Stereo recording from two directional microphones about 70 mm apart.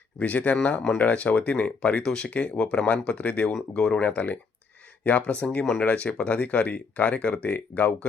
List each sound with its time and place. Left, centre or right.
0.2 s speech: left
3.5 s speech: centre
4.1 s speech: left